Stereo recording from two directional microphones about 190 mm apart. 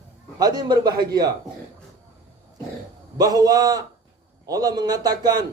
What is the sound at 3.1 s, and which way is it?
A man's voice, 20° right (ahead or behind).